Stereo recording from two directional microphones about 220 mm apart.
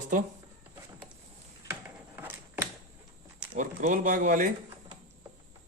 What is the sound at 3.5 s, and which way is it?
Speech, 35° right (ahead or behind).